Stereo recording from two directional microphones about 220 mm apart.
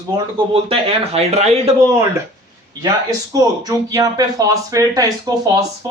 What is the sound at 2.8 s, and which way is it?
Speech, 15° right (ahead or behind).